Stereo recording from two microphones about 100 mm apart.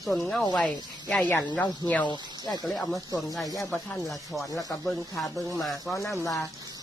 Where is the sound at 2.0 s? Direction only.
45° left (ahead or behind).